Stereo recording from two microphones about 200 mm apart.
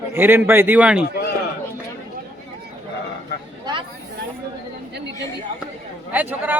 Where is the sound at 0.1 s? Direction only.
10° right (ahead or behind).